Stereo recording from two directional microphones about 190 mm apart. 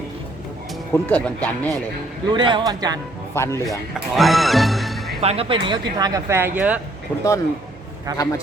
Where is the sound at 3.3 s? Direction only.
15° left (ahead or behind).